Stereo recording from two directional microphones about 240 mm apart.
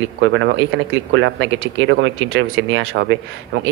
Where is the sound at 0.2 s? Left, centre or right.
Right.